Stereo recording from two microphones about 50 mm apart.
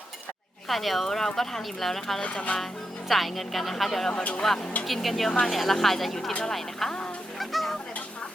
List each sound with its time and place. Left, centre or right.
0.7 s speech: centre
2.2 s speech: left
3.1 s speech: centre
4.2 s speech: left
4.4 s speech: centre
7.3 s fowl: centre